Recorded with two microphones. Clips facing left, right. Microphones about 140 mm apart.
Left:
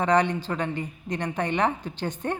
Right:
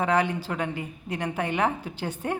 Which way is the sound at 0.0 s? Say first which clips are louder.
Left 2 dB; 5° right (ahead or behind).